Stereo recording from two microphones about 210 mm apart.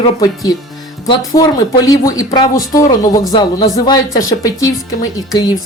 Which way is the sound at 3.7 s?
15° left (ahead or behind).